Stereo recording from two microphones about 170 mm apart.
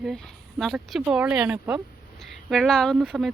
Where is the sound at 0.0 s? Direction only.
Centre (ahead or behind).